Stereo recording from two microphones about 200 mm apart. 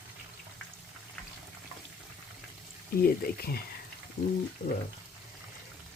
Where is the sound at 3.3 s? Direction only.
50° left (ahead or behind).